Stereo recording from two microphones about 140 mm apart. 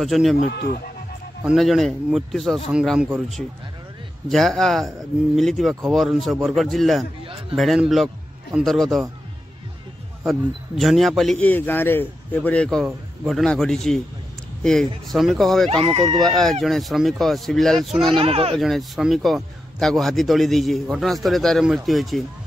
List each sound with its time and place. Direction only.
0.0 s a man's voice: centre (ahead or behind)
0.4 s speech: 90° left
1.4 s a man's voice: 5° right (ahead or behind)
4.3 s a man's voice: centre (ahead or behind)
10.8 s a man's voice: centre (ahead or behind)
15.7 s speech: 45° right (ahead or behind)
16.3 s a man's voice: centre (ahead or behind)
18.2 s speech: 45° right (ahead or behind)
18.6 s a man's voice: centre (ahead or behind)